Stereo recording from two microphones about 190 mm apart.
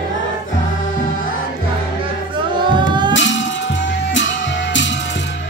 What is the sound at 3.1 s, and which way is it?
Music, 75° left (ahead or behind).